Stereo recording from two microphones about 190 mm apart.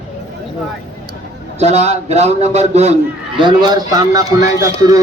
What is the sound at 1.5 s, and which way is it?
A man's voice, 35° right (ahead or behind).